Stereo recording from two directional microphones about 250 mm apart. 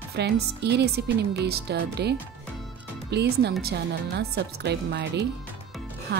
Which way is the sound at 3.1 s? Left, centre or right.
Right.